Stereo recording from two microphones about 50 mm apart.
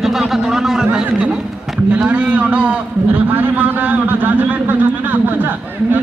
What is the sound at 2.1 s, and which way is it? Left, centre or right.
A man's voice, right.